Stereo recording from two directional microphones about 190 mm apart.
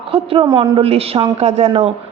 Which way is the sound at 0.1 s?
30° right (ahead or behind).